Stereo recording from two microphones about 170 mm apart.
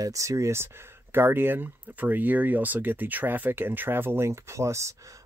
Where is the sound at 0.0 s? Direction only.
20° right (ahead or behind).